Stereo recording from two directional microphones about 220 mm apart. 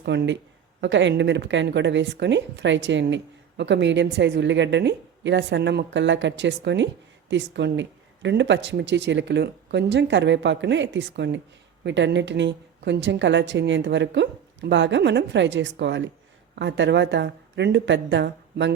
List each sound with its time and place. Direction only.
0.0 s a woman's voice: 50° right (ahead or behind)